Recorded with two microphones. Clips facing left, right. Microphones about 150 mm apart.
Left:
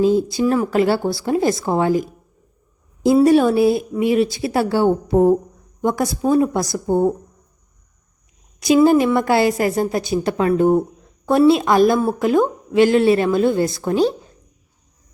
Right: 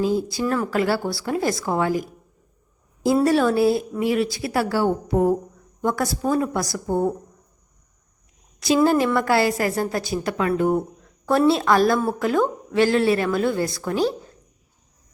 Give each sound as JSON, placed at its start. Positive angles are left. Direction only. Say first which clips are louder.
{"t": 0.0, "sound": "a woman's voice", "louder": "left 6 dB", "side_deg": 20}
{"t": 3.2, "sound": "a woman's voice", "louder": "left 2 dB", "side_deg": 20}
{"t": 8.6, "sound": "a woman's voice", "louder": "left 5 dB", "side_deg": 15}